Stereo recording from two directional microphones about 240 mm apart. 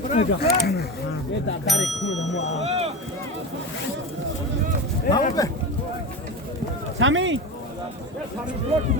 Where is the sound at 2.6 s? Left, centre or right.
Right.